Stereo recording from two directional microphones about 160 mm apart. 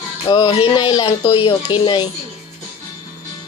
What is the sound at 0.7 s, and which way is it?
Speech, 25° left (ahead or behind).